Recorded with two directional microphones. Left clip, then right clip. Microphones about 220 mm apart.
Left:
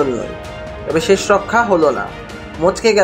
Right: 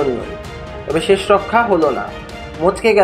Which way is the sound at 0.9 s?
25° left (ahead or behind).